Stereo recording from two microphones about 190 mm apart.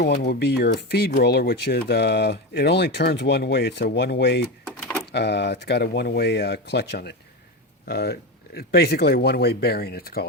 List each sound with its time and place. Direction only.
0.3 s speech: 60° left (ahead or behind)
4.6 s a sound: 5° left (ahead or behind)
5.1 s speech: 65° left (ahead or behind)